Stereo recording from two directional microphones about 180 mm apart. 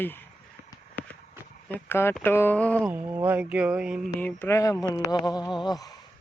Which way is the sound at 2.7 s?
10° right (ahead or behind).